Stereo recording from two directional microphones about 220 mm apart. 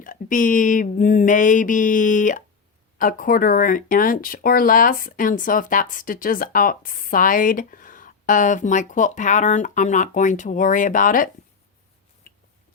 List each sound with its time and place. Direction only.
0.0 s speech: 40° left (ahead or behind)